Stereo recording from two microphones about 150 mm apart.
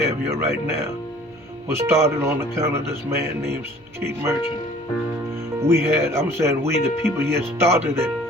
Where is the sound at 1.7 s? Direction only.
15° right (ahead or behind).